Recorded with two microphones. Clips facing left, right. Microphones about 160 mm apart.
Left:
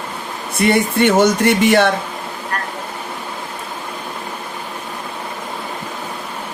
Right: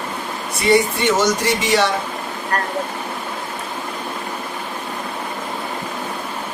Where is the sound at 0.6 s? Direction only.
55° left (ahead or behind).